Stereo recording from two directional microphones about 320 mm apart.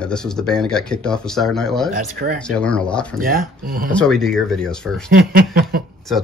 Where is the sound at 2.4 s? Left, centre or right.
Centre.